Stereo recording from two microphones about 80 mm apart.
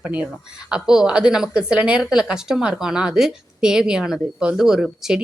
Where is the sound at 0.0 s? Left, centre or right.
Centre.